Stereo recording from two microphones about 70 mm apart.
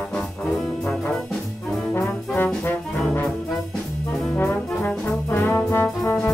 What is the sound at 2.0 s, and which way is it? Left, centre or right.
Trombone, left.